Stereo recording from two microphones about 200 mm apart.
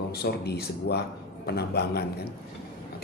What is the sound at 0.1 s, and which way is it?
A man's voice, 55° left (ahead or behind).